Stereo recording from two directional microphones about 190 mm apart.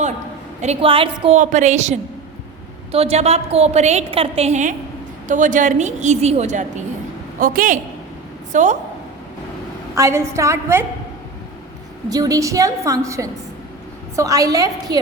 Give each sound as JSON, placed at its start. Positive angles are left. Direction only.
{"t": 0.6, "sound": "a woman's voice", "side_deg": -30}
{"t": 1.4, "sound": "a woman's voice", "side_deg": -40}
{"t": 9.9, "sound": "a woman's voice", "side_deg": -15}
{"t": 12.0, "sound": "a woman's voice", "side_deg": -20}